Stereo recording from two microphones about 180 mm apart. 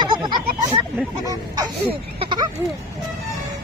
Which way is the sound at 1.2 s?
20° right (ahead or behind).